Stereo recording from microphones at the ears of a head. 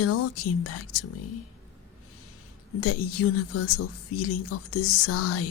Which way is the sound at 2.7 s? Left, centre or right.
Left.